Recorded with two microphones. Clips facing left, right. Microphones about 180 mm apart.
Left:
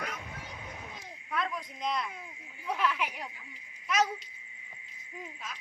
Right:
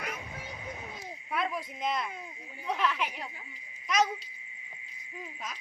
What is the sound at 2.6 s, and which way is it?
Child singing, 10° left (ahead or behind).